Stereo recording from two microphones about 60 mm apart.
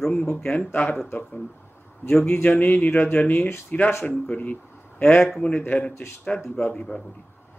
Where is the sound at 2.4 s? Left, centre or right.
Left.